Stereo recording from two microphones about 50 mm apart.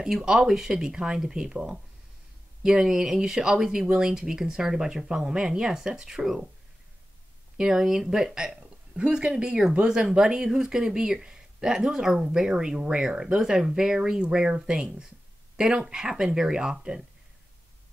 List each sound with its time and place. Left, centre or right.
0.0 s speech: centre
7.5 s speech: centre